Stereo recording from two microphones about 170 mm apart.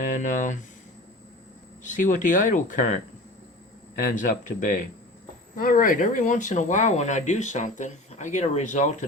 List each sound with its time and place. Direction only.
0.0 s speech: 50° left (ahead or behind)
1.8 s speech: 50° left (ahead or behind)